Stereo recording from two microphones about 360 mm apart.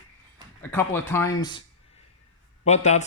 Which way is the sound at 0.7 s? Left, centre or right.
Centre.